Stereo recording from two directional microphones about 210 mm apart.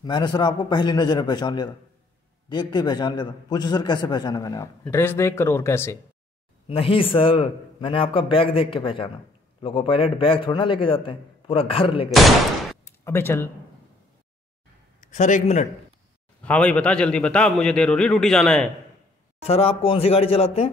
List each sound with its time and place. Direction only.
0.0 s a man's voice: 20° left (ahead or behind)
6.7 s a man's voice: 25° left (ahead or behind)
12.8 s a sound: 10° left (ahead or behind)
15.0 s a man's voice: 35° left (ahead or behind)
16.4 s a man's voice: 5° left (ahead or behind)
19.4 s a man's voice: 30° left (ahead or behind)